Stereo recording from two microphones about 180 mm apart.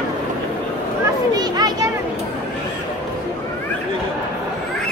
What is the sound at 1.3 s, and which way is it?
Children playing, 20° right (ahead or behind).